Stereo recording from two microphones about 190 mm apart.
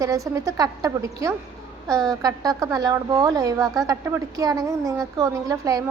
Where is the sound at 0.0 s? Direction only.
15° right (ahead or behind).